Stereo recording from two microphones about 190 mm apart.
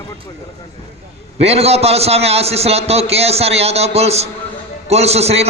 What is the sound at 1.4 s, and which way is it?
A man's voice, 35° right (ahead or behind).